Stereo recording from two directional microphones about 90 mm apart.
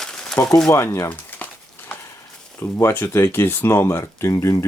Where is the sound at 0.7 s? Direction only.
35° left (ahead or behind).